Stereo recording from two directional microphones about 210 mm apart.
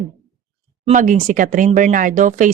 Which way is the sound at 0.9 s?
35° right (ahead or behind).